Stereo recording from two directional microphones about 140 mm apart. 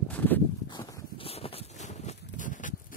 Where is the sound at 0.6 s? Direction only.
30° left (ahead or behind).